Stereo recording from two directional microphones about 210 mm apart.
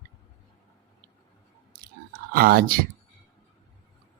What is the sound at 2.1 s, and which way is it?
Speech, 45° right (ahead or behind).